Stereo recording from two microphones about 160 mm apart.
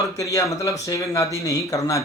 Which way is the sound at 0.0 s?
20° left (ahead or behind).